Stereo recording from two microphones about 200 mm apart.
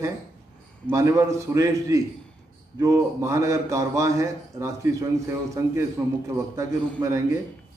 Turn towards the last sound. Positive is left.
turn(degrees=-15)  # may be behind; listen again after turning